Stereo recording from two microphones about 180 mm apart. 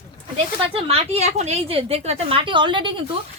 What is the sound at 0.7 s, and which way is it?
A woman's voice, 35° right (ahead or behind).